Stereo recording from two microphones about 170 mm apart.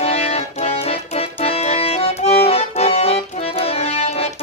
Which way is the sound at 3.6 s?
35° left (ahead or behind).